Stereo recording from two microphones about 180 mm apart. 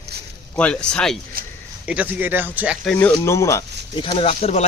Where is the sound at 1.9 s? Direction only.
10° right (ahead or behind).